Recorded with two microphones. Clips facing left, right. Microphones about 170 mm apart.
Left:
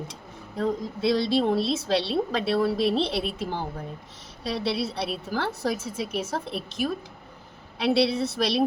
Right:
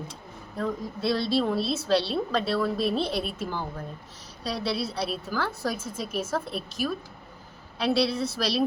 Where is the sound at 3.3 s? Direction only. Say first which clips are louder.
Left 2 dB; 65° left (ahead or behind).